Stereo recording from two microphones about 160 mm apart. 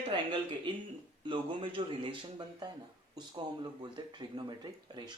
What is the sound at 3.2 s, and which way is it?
Speech, 25° right (ahead or behind).